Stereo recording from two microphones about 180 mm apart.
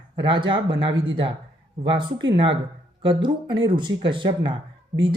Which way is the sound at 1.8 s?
25° right (ahead or behind).